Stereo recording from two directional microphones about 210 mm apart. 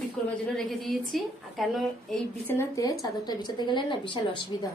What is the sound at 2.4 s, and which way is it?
A woman's voice, 15° left (ahead or behind).